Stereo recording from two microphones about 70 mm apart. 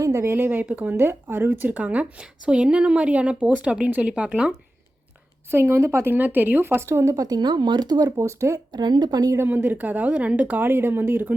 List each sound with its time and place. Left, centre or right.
0.0 s speech: right; by 4.5 s centre
5.5 s speech: right
6.1 s speech: right
7.3 s speech: right
8.2 s speech: right
8.5 s speech: right
9.5 s speech: right